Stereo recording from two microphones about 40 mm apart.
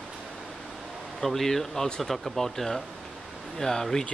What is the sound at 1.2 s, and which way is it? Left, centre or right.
Speech, centre.